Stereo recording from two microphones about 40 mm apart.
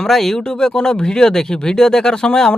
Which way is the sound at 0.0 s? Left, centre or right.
Centre.